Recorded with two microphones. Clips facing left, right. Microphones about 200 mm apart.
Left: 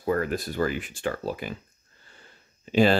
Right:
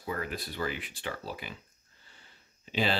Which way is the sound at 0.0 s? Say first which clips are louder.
Left 10 dB; 50° left (ahead or behind).